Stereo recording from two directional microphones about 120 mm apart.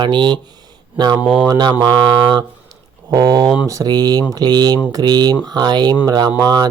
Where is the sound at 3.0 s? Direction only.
35° right (ahead or behind).